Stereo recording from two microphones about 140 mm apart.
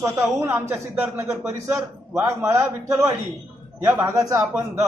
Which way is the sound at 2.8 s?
20° right (ahead or behind).